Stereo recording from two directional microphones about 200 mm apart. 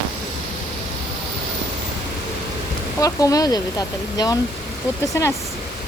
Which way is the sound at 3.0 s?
15° left (ahead or behind).